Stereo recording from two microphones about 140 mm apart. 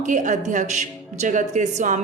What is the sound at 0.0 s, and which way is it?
A woman's voice, 60° right (ahead or behind).